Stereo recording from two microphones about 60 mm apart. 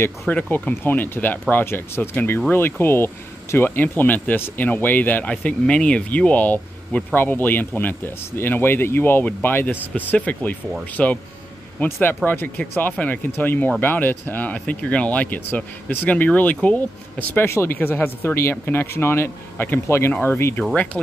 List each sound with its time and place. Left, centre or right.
0.3 s speech: left
11.0 s speech: centre
11.8 s speech: left